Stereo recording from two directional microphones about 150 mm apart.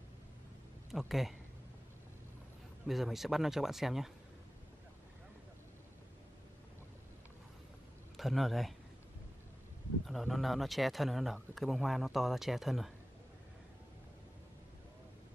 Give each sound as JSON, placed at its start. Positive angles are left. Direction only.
{"t": 0.9, "sound": "speech", "side_deg": 0}
{"t": 2.9, "sound": "speech", "side_deg": 0}
{"t": 8.2, "sound": "speech", "side_deg": 0}
{"t": 10.0, "sound": "speech", "side_deg": 0}